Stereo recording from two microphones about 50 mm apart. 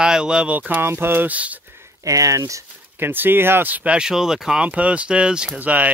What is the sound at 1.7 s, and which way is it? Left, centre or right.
Speech, right.